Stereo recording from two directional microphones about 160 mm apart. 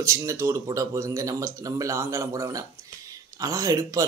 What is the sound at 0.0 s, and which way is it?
Speech, 20° right (ahead or behind).